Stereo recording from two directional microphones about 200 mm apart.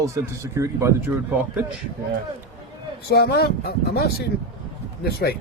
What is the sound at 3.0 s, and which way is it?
Speech, 55° left (ahead or behind).